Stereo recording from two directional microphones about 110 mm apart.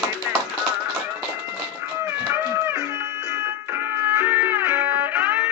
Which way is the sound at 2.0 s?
25° right (ahead or behind).